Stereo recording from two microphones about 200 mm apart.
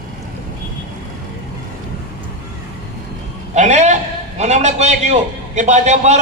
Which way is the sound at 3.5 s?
35° right (ahead or behind).